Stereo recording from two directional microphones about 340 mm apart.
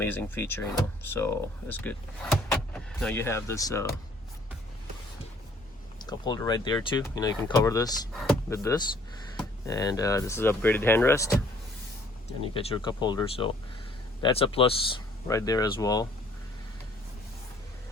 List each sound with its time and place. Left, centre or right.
0.0 s speech: centre
6.0 s speech: centre